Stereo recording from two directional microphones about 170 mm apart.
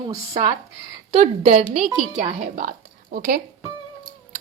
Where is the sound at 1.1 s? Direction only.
40° right (ahead or behind).